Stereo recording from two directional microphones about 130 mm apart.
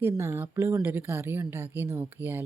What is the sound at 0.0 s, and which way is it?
Speech, 20° right (ahead or behind).